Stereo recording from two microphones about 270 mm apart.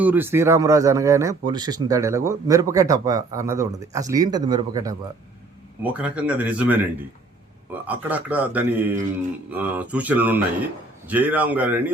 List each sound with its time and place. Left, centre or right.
0.0 s speech: centre